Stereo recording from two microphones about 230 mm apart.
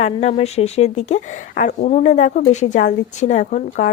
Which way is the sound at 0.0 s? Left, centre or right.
Left.